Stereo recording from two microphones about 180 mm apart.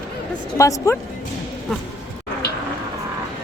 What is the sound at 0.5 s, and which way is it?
Speech, 15° left (ahead or behind).